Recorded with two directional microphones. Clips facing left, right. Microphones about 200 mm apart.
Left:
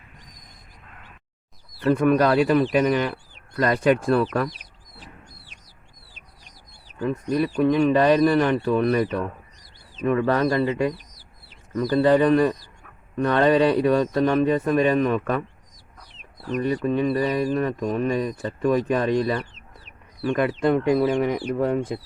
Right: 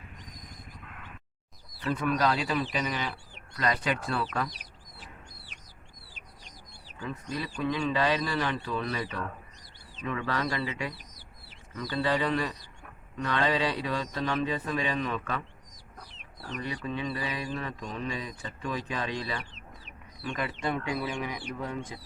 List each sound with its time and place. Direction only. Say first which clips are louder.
1.8 s speech: left 9 dB; 55° left (ahead or behind)
7.0 s speech: left 12 dB; 55° left (ahead or behind)
16.6 s speech: left 12 dB; 50° left (ahead or behind)